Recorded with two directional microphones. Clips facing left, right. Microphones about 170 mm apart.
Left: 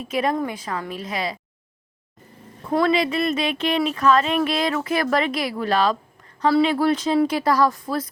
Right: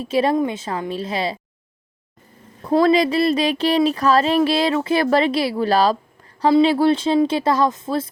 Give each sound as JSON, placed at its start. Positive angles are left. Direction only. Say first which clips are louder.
{"t": 0.0, "sound": "speech", "louder": "right 5 dB", "side_deg": -30}
{"t": 2.6, "sound": "speech", "louder": "right 4 dB", "side_deg": -35}